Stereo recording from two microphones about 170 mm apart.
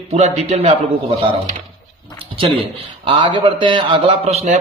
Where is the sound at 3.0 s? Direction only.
30° right (ahead or behind).